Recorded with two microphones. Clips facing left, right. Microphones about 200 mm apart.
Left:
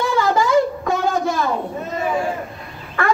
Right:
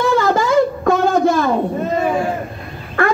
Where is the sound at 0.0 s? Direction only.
50° right (ahead or behind).